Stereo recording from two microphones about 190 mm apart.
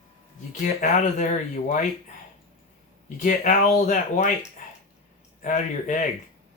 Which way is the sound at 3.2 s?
40° left (ahead or behind).